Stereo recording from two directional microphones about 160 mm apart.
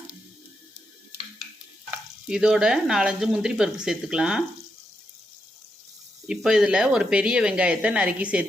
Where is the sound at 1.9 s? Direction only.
5° right (ahead or behind).